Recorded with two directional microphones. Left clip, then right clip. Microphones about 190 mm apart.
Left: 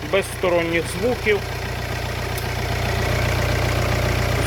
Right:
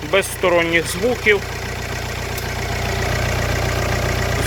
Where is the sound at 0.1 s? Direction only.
Centre (ahead or behind).